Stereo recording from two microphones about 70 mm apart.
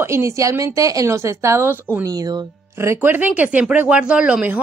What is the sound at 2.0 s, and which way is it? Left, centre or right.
Speech, right.